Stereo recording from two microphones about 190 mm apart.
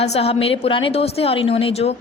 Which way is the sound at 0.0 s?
35° left (ahead or behind).